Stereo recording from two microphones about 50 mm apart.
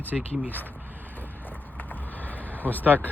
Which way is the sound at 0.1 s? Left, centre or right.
Centre.